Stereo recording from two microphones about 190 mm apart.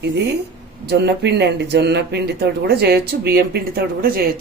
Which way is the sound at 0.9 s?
60° right (ahead or behind).